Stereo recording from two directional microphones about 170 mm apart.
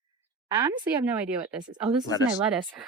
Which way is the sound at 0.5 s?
25° right (ahead or behind).